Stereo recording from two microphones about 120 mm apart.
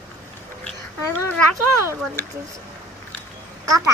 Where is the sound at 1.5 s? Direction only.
20° right (ahead or behind).